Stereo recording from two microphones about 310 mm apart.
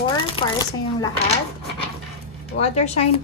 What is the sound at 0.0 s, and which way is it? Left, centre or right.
Chopping, centre.